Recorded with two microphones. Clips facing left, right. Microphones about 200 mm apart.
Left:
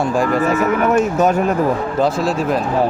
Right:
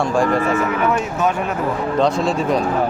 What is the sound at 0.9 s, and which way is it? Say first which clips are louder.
Speech: left 5 dB; 45° left (ahead or behind).